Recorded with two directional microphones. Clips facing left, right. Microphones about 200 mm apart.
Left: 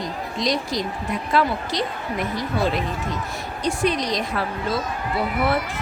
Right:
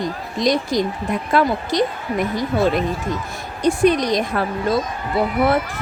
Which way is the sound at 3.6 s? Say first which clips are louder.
Right 7 dB; 50° right (ahead or behind).